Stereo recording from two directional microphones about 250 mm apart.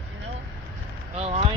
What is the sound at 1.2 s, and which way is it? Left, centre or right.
Speech, right.